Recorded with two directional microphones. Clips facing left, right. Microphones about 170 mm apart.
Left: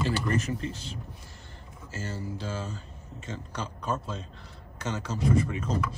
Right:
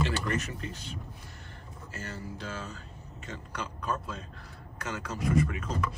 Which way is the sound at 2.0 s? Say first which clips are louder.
Left 4 dB; 30° left (ahead or behind).